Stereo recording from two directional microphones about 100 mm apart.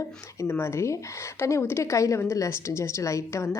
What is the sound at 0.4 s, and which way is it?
A woman's voice, 25° left (ahead or behind).